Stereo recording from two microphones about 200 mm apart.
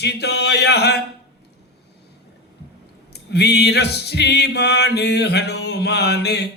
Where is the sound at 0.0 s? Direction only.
55° left (ahead or behind).